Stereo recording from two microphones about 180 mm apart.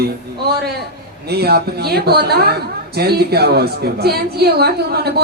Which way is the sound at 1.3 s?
60° right (ahead or behind).